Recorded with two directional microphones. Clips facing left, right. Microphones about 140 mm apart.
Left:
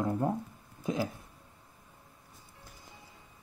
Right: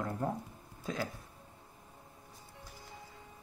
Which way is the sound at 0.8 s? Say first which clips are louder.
Left 5 dB; 20° left (ahead or behind).